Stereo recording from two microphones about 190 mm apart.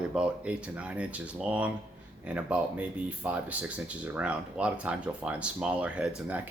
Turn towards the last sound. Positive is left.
turn(degrees=-5)  # may be behind; listen again after turning